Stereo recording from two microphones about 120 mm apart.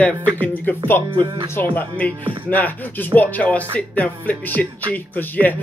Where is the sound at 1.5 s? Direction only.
15° left (ahead or behind).